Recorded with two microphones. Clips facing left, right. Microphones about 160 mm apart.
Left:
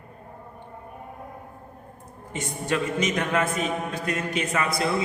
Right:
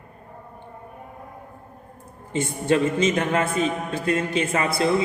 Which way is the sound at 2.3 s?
30° right (ahead or behind).